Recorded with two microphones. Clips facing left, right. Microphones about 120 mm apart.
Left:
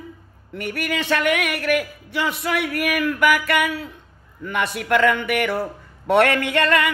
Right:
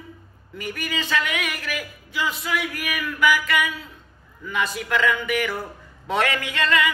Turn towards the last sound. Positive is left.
turn(degrees=55)  # may be behind; listen again after turning